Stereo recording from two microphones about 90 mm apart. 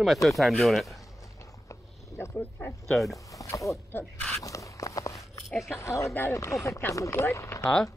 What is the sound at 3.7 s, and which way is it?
Speech, 30° left (ahead or behind).